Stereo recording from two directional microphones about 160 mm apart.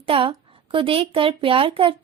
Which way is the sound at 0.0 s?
35° right (ahead or behind).